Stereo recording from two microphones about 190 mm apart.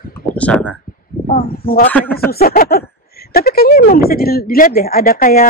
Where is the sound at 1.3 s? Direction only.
50° left (ahead or behind).